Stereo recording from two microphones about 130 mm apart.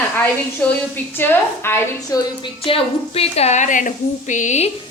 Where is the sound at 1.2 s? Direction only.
15° left (ahead or behind).